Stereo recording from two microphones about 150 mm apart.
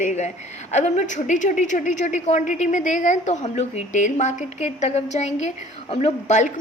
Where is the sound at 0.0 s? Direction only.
50° left (ahead or behind).